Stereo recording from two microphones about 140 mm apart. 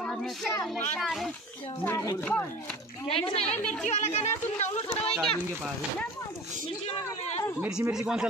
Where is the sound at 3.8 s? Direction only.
55° left (ahead or behind).